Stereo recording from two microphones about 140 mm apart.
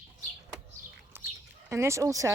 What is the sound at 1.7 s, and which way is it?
Speech, 20° right (ahead or behind).